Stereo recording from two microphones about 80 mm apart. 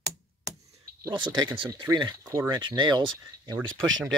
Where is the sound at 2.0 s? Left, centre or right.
Right.